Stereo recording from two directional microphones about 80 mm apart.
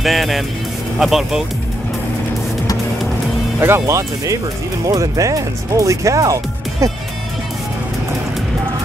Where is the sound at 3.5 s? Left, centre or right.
Right.